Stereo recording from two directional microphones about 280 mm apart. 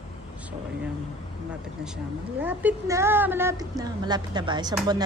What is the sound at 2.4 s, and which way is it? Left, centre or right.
A woman's voice, centre.